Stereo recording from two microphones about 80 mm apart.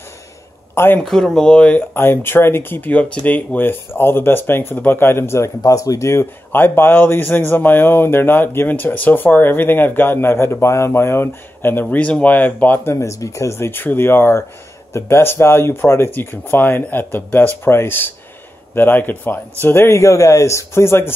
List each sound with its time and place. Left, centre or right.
0.7 s speech: left
1.0 s speech: centre
1.8 s speech: left
5.6 s speech: left
12.9 s speech: left